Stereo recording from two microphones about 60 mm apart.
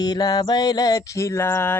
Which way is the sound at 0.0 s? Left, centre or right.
Left.